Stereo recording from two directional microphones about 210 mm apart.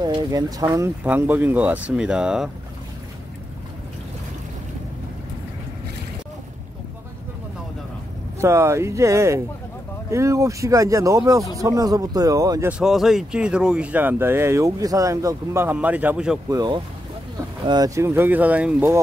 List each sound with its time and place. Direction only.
0.0 s speech: 20° right (ahead or behind)
8.4 s speech: 15° right (ahead or behind)
16.4 s speech: 20° right (ahead or behind)